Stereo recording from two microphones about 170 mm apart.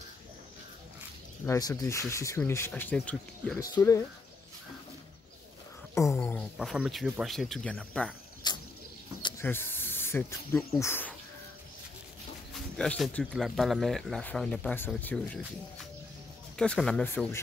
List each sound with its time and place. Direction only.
1.4 s speech: 20° left (ahead or behind)
3.5 s speech: 20° left (ahead or behind)
6.0 s speech: 5° left (ahead or behind)
8.4 s a sound: 25° left (ahead or behind)
9.4 s snake: 15° left (ahead or behind)
10.8 s speech: 10° left (ahead or behind)
12.5 s speech: 5° left (ahead or behind)
16.5 s speech: 5° left (ahead or behind)